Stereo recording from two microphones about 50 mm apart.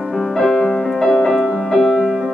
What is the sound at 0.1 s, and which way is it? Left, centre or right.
Music, centre.